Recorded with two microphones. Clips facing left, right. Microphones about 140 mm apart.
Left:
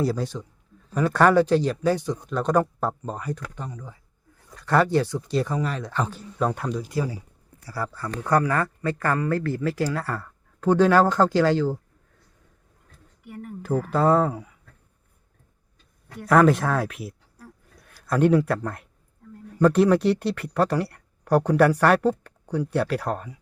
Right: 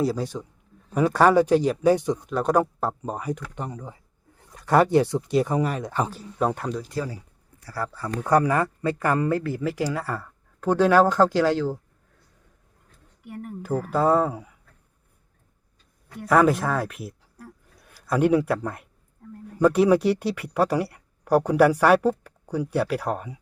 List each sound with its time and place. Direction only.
0.0 s speech: 5° right (ahead or behind)
3.5 s speech: 25° right (ahead or behind)
4.4 s speech: 15° right (ahead or behind); by 6.9 s centre (ahead or behind)
6.9 s speech: 10° left (ahead or behind)
8.0 s speech: 15° right (ahead or behind)
13.9 s speech: 5° right (ahead or behind)
16.2 s speech: centre (ahead or behind)